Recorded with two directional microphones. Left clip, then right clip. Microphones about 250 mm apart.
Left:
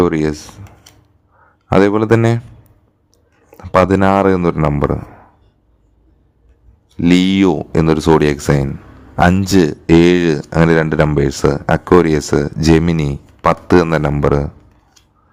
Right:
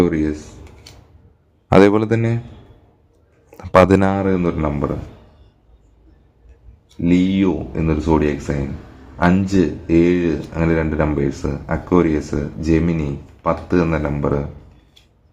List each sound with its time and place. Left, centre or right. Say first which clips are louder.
1.6 s speech: even; centre
3.5 s speech: even; centre
4.2 s speech: left 6 dB; left
7.0 s speech: left 5 dB; left